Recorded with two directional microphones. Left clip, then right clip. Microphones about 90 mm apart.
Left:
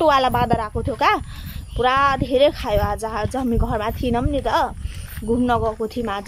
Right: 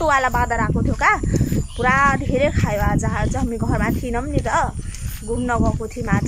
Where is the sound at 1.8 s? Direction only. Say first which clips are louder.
Right 1 dB; 40° left (ahead or behind).